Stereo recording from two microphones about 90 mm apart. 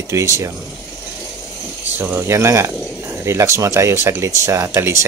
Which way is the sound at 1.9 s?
25° right (ahead or behind).